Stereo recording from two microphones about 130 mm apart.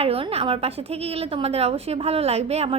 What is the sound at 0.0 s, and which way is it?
A woman's voice, 50° right (ahead or behind).